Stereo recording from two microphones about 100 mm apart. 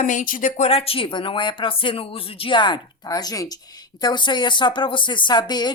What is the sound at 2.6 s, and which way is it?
A woman's voice, 45° left (ahead or behind).